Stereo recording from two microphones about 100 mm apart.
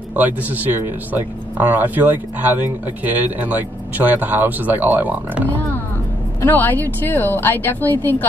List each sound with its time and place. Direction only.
0.1 s speech: 20° right (ahead or behind)
6.4 s speech: 20° left (ahead or behind)